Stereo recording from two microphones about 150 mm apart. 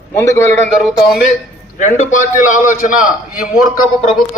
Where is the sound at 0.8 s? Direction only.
5° right (ahead or behind).